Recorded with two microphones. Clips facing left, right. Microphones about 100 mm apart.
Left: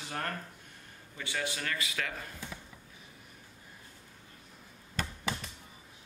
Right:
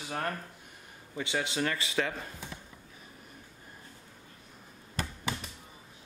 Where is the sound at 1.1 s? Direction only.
25° right (ahead or behind).